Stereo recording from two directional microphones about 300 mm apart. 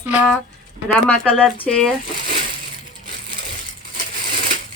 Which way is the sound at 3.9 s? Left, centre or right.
Right.